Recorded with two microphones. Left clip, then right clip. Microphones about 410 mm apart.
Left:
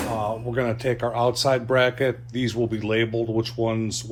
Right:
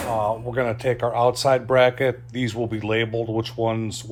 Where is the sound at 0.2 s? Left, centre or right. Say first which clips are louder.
Right 3 dB; right.